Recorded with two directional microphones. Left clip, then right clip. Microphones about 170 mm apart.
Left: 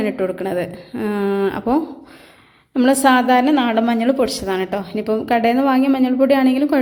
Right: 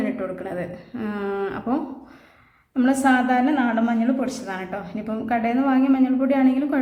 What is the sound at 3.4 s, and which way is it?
A woman's voice, 60° left (ahead or behind).